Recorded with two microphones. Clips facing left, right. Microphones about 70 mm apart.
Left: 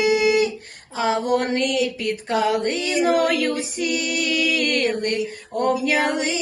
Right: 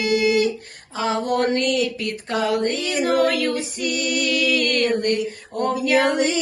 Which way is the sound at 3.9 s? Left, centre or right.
Right.